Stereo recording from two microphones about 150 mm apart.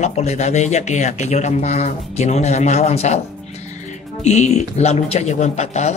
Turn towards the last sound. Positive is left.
turn(degrees=50)  # may be behind; listen again after turning